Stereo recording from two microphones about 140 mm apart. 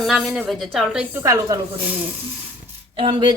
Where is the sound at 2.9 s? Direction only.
40° right (ahead or behind).